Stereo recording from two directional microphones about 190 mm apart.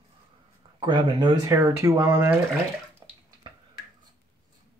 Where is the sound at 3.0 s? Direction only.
20° right (ahead or behind).